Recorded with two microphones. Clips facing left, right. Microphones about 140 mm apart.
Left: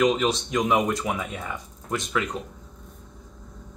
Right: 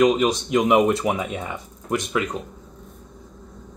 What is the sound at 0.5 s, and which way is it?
Speech, 20° right (ahead or behind).